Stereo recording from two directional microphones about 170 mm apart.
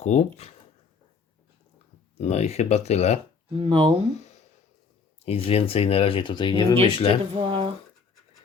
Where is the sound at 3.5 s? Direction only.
30° right (ahead or behind).